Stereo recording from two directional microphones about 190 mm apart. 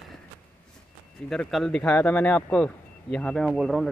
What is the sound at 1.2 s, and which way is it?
Speech, 5° left (ahead or behind).